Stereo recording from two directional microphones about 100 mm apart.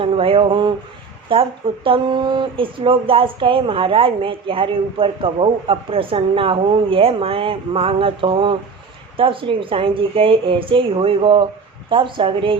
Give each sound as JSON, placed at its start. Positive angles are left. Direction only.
{"t": 0.0, "sound": "speech", "side_deg": -65}